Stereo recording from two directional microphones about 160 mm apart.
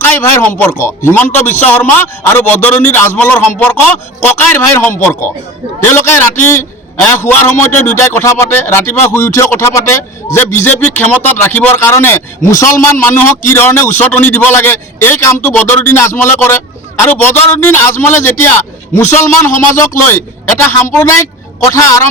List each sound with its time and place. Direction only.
0.0 s a man's voice: 15° left (ahead or behind)